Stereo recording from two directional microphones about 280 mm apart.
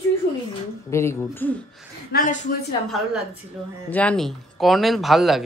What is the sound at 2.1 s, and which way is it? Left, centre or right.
Speech, left.